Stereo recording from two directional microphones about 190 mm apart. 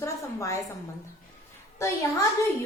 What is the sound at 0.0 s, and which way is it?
Speech, 15° left (ahead or behind).